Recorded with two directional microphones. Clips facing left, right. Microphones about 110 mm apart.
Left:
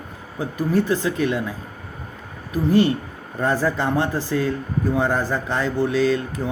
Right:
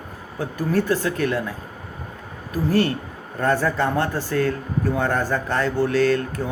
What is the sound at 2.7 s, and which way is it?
Speech, 20° left (ahead or behind).